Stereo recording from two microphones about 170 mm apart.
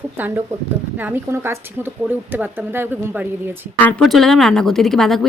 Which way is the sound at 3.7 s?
5° left (ahead or behind).